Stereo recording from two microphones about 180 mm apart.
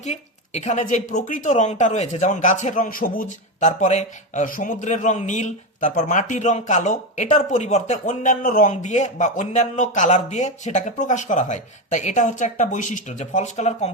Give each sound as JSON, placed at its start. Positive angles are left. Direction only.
{"t": 0.0, "sound": "speech", "side_deg": 40}